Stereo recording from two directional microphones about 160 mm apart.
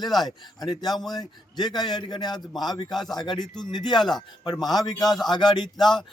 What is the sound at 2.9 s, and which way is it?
Speech, centre (ahead or behind).